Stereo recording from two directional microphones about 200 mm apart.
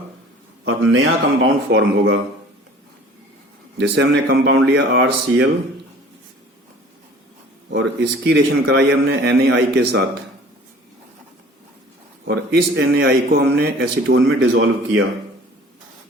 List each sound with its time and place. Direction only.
0.6 s speech: 85° right
3.8 s a man's voice: 60° right (ahead or behind)
7.7 s a man's voice: 60° right (ahead or behind)
12.3 s speech: 55° right (ahead or behind)
14.2 s speech: 80° right